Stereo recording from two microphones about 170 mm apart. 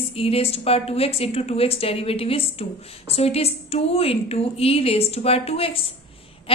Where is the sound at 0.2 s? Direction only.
35° left (ahead or behind).